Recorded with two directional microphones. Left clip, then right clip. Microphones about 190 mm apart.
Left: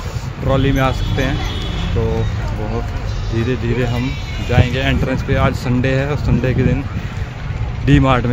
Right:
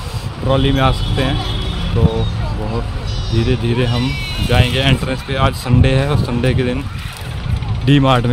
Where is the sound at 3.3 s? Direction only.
15° right (ahead or behind).